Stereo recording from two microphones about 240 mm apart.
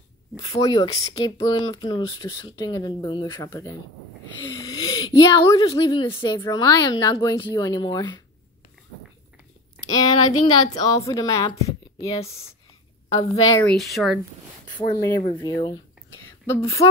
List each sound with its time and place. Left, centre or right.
0.4 s speech: centre
9.9 s speech: centre
13.7 s speech: centre
14.8 s speech: centre